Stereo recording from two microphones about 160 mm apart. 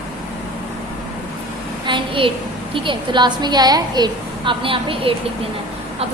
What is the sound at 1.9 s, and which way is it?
A woman's voice, 35° right (ahead or behind).